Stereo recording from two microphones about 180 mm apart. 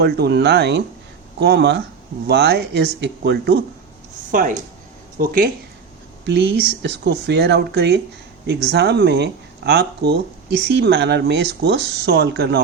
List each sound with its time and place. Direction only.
0.0 s speech: 70° right (ahead or behind)
4.3 s speech: 50° right (ahead or behind)
6.2 s speech: 70° right (ahead or behind)
10.8 s speech: 70° right (ahead or behind)